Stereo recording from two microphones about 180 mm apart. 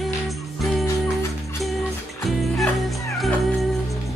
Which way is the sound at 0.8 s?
15° left (ahead or behind).